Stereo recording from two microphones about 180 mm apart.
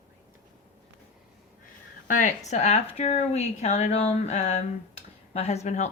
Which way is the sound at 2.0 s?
45° left (ahead or behind).